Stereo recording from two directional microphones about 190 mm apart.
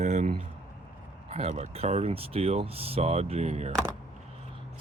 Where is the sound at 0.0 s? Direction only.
40° right (ahead or behind).